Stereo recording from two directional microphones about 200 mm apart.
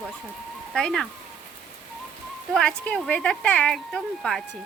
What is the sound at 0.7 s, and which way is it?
Speech, 5° left (ahead or behind).